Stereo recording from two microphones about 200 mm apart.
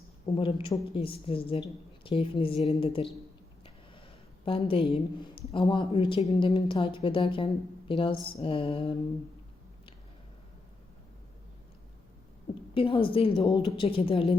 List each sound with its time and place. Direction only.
0.3 s a woman's voice: 25° left (ahead or behind)
4.4 s a woman's voice: 25° left (ahead or behind)
12.7 s a woman's voice: 25° left (ahead or behind)